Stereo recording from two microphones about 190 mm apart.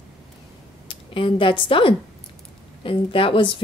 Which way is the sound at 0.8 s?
25° left (ahead or behind).